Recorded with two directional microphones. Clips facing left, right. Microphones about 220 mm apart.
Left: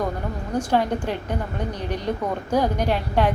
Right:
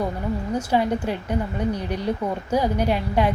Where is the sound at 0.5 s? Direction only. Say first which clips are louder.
Left 1 dB; 10° right (ahead or behind).